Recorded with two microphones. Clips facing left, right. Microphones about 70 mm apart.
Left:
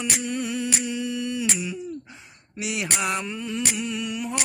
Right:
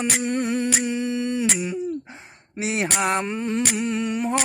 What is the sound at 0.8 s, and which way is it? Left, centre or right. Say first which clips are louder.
Humming: right 4 dB; right.